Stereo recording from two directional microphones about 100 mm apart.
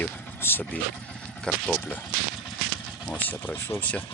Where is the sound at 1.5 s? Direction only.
10° left (ahead or behind).